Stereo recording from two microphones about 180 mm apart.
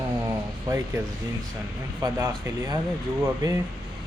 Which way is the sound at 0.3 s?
15° right (ahead or behind).